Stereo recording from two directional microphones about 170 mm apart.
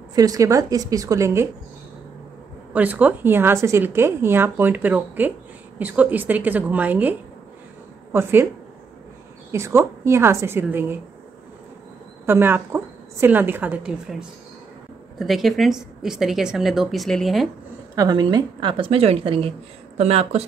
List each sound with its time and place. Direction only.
0.1 s a woman's voice: 20° right (ahead or behind)
2.7 s speech: 10° right (ahead or behind)
9.5 s speech: 15° right (ahead or behind)
12.3 s speech: 15° right (ahead or behind)
15.1 s a woman's voice: centre (ahead or behind)
17.9 s a woman's voice: 25° right (ahead or behind)